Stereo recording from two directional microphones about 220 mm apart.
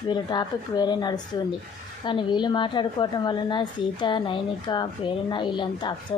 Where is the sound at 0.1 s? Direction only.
20° left (ahead or behind).